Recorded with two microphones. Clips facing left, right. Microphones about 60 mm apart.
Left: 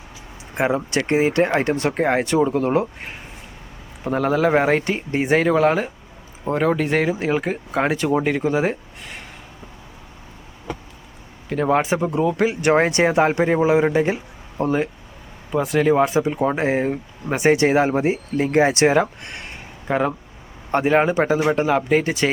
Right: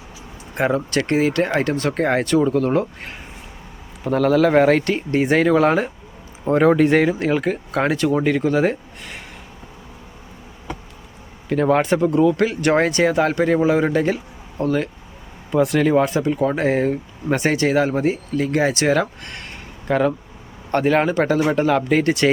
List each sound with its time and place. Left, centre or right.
0.5 s speech: centre
1.9 s speech: centre
11.4 s speech: centre
12.9 s speech: left
15.5 s speech: centre
17.6 s speech: left; by 22.3 s centre